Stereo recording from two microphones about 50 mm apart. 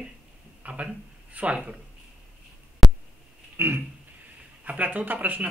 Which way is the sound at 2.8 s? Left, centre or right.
Centre.